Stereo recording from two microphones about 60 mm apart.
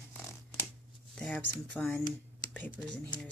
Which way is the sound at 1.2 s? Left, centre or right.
Centre.